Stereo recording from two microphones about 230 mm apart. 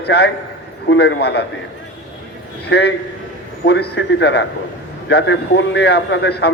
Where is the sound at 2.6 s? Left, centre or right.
Left.